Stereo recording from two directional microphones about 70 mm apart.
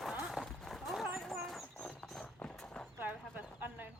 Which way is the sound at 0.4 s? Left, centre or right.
Centre.